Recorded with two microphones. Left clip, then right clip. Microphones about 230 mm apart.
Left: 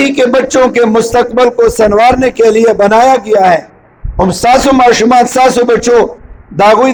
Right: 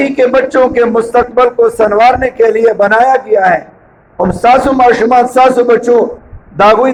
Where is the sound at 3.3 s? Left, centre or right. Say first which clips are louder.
Left 2 dB; left.